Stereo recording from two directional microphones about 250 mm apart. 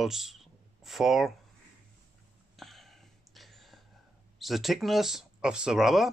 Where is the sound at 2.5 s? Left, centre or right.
Centre.